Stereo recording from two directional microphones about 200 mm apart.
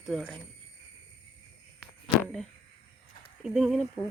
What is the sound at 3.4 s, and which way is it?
Speech, 5° right (ahead or behind).